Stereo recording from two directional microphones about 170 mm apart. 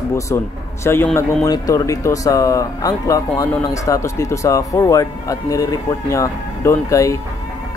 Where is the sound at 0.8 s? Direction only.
15° left (ahead or behind).